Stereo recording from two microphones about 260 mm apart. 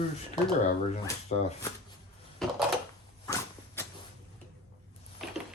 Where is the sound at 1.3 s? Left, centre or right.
Left.